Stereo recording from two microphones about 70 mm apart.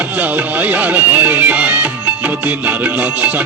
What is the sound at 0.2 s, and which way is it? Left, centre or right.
Music, right.